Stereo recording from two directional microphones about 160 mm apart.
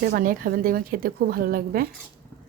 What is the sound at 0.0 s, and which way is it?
A woman's voice, 65° right (ahead or behind).